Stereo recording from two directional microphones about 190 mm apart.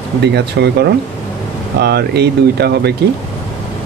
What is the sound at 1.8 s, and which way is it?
Speech, 55° right (ahead or behind).